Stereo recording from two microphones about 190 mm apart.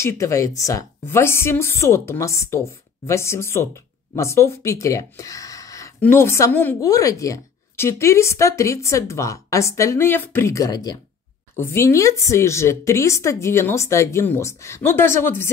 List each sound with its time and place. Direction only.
0.0 s speech: 15° left (ahead or behind)